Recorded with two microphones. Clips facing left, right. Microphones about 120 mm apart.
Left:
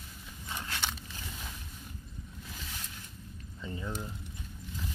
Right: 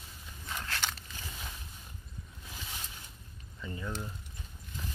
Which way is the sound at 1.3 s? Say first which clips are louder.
Even; 5° right (ahead or behind).